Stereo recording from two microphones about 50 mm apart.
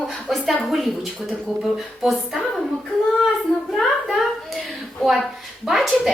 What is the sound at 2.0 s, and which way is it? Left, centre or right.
Speech, centre.